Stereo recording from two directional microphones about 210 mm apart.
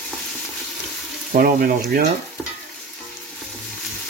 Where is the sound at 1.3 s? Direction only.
45° right (ahead or behind).